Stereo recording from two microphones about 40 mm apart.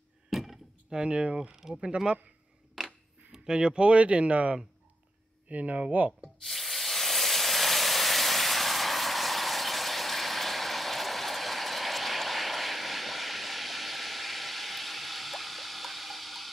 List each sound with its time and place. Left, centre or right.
0.3 s door: centre
0.8 s speech: right
1.5 s speech: centre
2.8 s a sound: centre
3.3 s speech: centre; by 6.1 s right
6.4 s steam: centre